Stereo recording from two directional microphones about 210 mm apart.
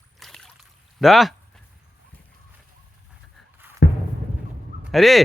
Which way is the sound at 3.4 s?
Centre (ahead or behind).